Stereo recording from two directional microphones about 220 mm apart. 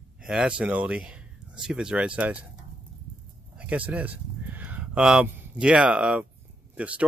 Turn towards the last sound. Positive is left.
turn(degrees=-5)  # may be behind; listen again after turning